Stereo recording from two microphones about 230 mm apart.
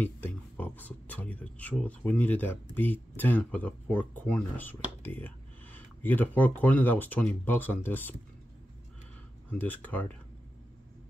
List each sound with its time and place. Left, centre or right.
0.0 s speech: centre
9.5 s speech: centre